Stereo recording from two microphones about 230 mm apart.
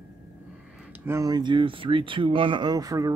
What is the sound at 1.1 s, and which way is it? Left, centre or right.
Speech, centre.